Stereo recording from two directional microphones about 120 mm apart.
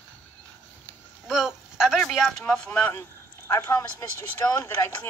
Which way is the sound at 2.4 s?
10° left (ahead or behind).